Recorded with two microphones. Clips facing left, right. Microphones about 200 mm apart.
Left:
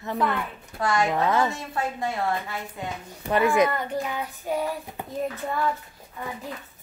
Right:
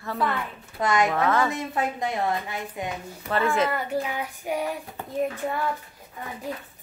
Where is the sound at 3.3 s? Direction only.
15° left (ahead or behind).